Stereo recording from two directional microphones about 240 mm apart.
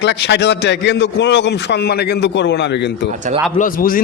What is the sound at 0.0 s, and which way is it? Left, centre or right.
A man's voice, left.